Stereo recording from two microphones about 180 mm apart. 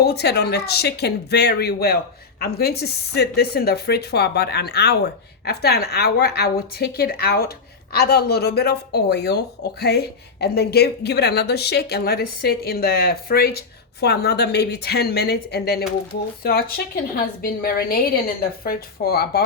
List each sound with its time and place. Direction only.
0.0 s a woman's voice: 65° left (ahead or behind)